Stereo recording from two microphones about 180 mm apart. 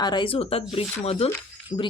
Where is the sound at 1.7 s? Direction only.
25° left (ahead or behind).